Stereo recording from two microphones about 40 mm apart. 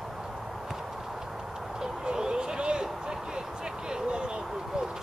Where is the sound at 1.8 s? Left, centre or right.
Centre.